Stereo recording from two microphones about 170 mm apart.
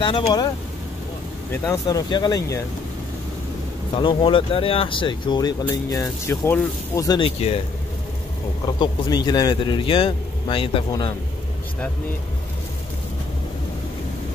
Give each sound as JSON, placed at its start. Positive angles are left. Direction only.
{"t": 0.0, "sound": "speech", "side_deg": 25}
{"t": 1.5, "sound": "speech", "side_deg": 20}
{"t": 3.9, "sound": "speech", "side_deg": 30}
{"t": 7.1, "sound": "speech", "side_deg": 30}
{"t": 8.6, "sound": "speech", "side_deg": 25}